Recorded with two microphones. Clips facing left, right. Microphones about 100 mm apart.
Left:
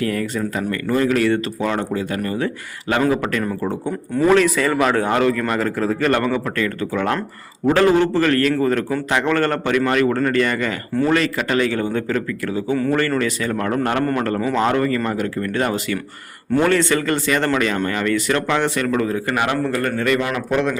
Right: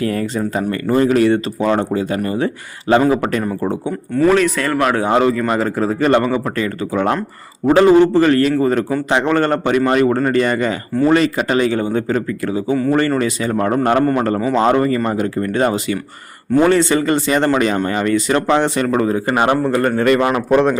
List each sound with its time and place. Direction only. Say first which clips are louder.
0.0 s speech: right 3 dB; 30° right (ahead or behind)
4.3 s speech: even; centre (ahead or behind)
5.0 s a man's voice: right 3 dB; 20° right (ahead or behind)
14.0 s a man's voice: right 4 dB; 10° right (ahead or behind)
14.5 s a man's voice: right 5 dB; 25° right (ahead or behind)